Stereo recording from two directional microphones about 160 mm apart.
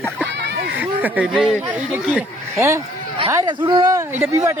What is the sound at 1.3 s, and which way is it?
Speech, centre (ahead or behind).